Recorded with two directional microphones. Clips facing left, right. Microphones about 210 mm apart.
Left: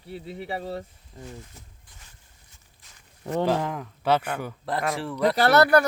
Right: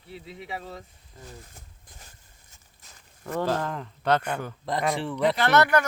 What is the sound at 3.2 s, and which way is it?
Speech, 25° left (ahead or behind).